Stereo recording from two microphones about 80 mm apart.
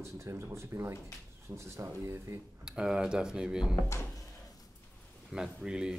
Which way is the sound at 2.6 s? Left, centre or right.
Centre.